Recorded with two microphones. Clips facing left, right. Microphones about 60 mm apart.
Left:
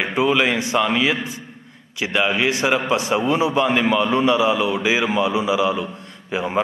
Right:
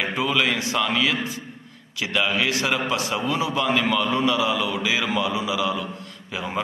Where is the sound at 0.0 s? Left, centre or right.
Left.